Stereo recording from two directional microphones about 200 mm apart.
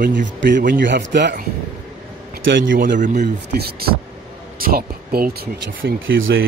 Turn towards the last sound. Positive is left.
turn(degrees=-70)  # may be behind; listen again after turning